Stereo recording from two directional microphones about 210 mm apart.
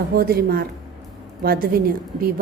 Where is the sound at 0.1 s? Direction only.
45° right (ahead or behind).